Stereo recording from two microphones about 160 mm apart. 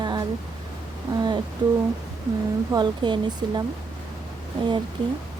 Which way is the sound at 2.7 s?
30° right (ahead or behind).